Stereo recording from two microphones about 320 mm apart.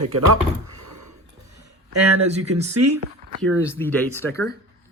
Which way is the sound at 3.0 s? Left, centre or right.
Right.